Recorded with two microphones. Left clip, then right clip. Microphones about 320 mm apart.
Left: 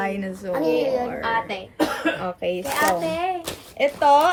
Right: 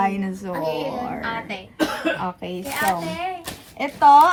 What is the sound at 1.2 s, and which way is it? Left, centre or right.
Speech, left.